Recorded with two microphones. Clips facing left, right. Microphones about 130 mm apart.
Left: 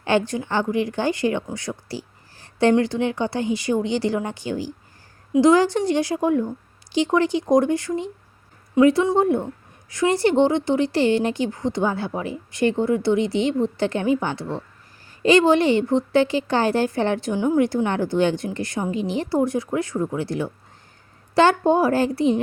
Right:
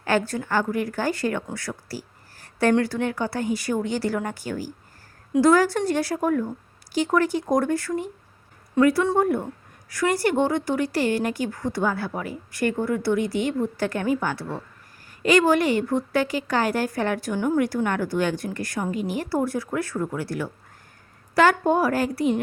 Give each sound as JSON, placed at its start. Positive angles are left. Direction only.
{"t": 0.0, "sound": "a woman's voice", "side_deg": 20}